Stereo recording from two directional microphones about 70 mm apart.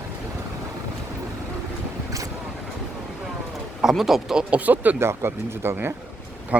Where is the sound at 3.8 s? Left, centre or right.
Centre.